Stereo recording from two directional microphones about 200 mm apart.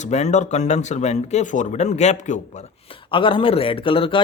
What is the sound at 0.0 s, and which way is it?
Speech, 35° left (ahead or behind).